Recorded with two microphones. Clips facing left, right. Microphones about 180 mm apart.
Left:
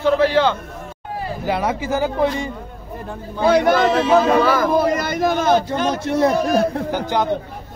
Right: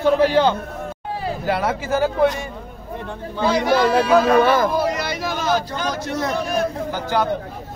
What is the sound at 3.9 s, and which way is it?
Music, 25° left (ahead or behind).